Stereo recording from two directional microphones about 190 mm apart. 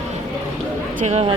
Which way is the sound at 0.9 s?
35° right (ahead or behind).